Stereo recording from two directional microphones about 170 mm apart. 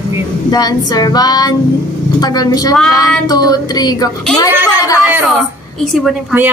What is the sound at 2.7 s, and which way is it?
Speech, centre (ahead or behind).